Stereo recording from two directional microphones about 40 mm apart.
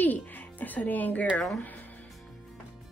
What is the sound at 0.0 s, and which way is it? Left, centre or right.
Speech, left.